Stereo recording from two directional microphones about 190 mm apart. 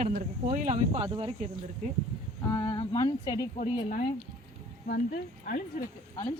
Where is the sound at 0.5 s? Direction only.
40° right (ahead or behind).